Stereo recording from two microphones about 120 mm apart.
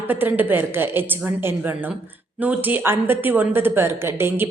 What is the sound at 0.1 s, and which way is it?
A woman's voice, 15° right (ahead or behind).